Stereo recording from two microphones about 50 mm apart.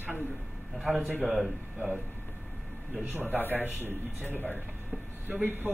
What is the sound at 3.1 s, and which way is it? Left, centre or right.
Speech, right.